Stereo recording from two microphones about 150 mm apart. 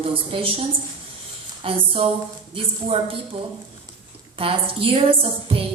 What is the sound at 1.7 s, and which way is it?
A woman's voice, 40° right (ahead or behind).